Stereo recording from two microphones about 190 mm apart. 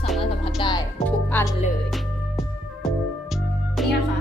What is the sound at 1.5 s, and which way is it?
Music, centre (ahead or behind).